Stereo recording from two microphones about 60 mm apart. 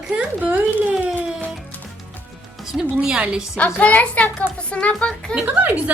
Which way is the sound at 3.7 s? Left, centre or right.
Left.